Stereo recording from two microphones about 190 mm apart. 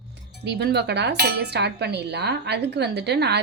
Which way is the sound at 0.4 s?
60° right (ahead or behind).